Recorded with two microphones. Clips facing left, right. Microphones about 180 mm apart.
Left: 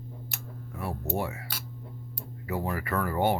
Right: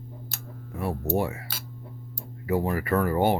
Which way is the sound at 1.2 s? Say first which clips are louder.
Right 4 dB; 30° right (ahead or behind).